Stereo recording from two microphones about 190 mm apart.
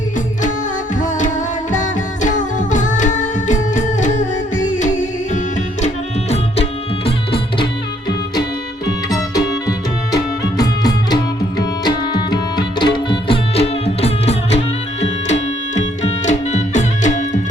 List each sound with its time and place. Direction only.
1.7 s music: 40° left (ahead or behind)
9.0 s tabla: 20° left (ahead or behind)
10.6 s music: 20° left (ahead or behind); by 17.4 s 40° left (ahead or behind)